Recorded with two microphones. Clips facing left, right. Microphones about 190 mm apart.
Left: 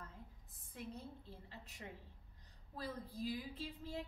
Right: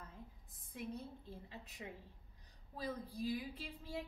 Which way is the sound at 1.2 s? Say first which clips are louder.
Right 3 dB; 15° right (ahead or behind).